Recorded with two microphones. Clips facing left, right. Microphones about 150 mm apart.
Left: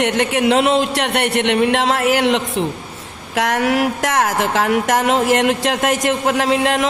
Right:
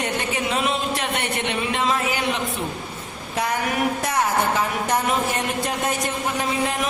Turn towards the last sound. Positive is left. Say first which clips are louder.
# left 7 dB
turn(degrees=90)